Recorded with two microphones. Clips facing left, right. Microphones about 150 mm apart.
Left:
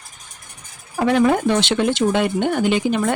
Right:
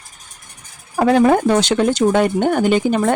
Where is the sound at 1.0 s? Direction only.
40° right (ahead or behind).